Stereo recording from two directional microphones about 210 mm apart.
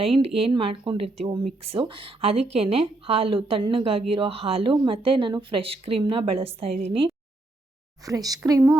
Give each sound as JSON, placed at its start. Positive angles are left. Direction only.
{"t": 0.0, "sound": "speech", "side_deg": -25}